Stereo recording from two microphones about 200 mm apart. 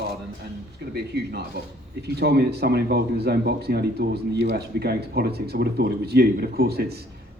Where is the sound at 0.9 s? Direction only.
55° right (ahead or behind).